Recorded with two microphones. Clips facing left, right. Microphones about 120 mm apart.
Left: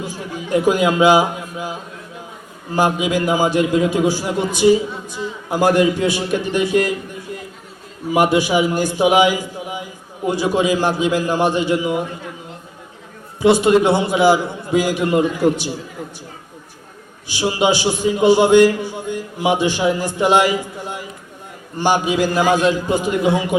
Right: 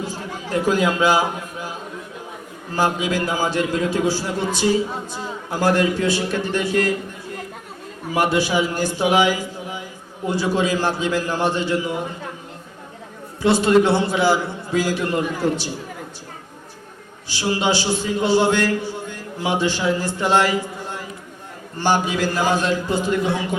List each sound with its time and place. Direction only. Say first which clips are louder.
0.5 s a man's voice: left 4 dB; 15° left (ahead or behind)
2.7 s a man's voice: left 3 dB; 15° left (ahead or behind)
8.1 s a man's voice: left 4 dB; 15° left (ahead or behind)
13.4 s a man's voice: left 3 dB; 15° left (ahead or behind)
17.2 s a man's voice: left 4 dB; 15° left (ahead or behind)